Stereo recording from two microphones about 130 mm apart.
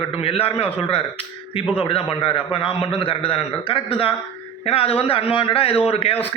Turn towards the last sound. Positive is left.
turn(degrees=50)  # may be behind; listen again after turning